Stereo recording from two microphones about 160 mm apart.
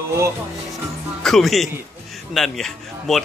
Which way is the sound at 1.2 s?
Centre (ahead or behind).